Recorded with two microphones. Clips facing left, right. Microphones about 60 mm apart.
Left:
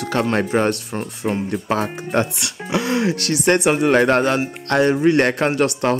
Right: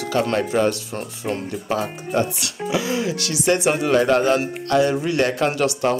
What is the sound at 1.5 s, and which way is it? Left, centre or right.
Speech, left.